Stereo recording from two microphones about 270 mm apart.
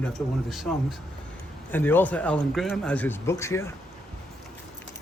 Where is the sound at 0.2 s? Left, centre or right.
Centre.